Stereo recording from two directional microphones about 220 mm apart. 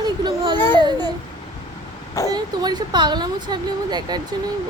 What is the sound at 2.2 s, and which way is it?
Speech, 20° right (ahead or behind).